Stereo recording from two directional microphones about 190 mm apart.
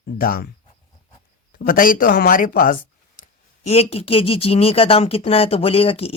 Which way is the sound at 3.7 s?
30° left (ahead or behind).